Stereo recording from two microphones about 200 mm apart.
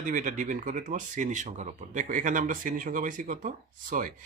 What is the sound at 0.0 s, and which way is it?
Speech, 40° right (ahead or behind).